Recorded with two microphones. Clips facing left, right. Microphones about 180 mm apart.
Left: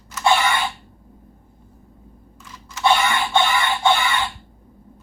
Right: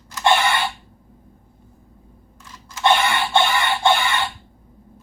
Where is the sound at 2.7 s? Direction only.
10° right (ahead or behind).